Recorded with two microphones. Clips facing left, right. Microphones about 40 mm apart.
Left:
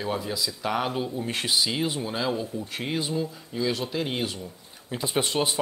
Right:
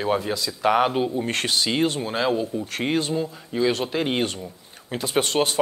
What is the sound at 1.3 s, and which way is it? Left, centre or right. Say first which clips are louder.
Speech: right 3 dB; right.